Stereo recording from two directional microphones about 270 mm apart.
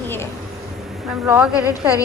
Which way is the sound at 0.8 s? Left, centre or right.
Centre.